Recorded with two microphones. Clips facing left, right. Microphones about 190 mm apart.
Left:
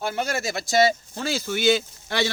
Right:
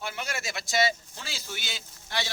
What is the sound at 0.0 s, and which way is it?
Speech, 40° left (ahead or behind).